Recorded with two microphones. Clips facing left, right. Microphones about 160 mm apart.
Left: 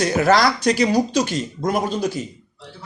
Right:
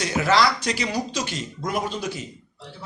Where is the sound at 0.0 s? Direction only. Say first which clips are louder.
Left 4 dB; 45° left (ahead or behind).